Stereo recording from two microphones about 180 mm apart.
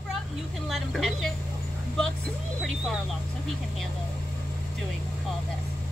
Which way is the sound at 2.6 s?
Centre (ahead or behind).